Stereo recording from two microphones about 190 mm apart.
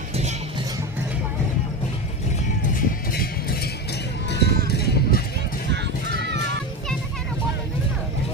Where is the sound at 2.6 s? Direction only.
50° left (ahead or behind).